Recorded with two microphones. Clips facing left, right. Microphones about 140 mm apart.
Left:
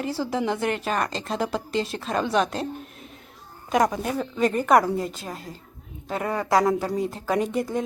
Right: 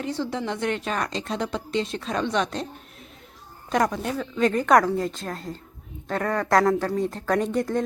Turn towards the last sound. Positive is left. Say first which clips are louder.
# right 1 dB
turn(degrees=5)  # may be behind; listen again after turning